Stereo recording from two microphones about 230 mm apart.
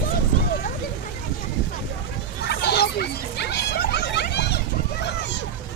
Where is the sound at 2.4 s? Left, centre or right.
Left.